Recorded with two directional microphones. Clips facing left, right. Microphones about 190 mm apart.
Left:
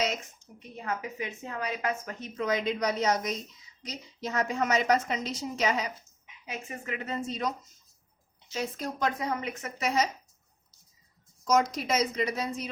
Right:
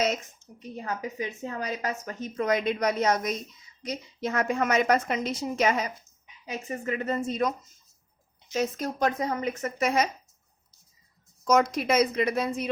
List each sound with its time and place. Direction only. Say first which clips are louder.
0.9 s a woman's voice: right 1 dB; 35° right (ahead or behind)
8.5 s a woman's voice: right 5 dB; 45° right (ahead or behind)
11.4 s a woman's voice: right 3 dB; 60° right (ahead or behind)